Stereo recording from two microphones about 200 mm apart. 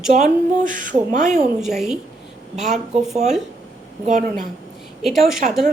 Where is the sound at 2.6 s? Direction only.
35° right (ahead or behind).